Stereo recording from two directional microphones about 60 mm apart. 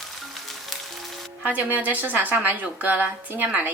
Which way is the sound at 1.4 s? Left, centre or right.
Right.